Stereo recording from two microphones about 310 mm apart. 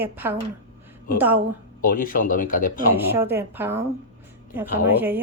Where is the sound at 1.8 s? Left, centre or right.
Left.